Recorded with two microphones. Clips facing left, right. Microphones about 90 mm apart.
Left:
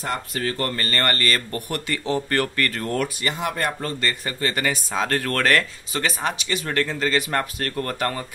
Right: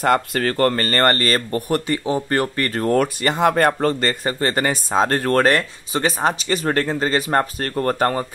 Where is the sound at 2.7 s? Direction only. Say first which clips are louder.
Right 7 dB; 40° right (ahead or behind).